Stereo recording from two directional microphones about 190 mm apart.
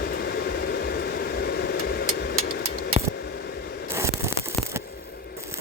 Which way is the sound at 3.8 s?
15° right (ahead or behind).